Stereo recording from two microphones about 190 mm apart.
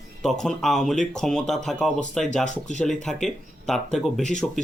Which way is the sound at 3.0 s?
Centre (ahead or behind).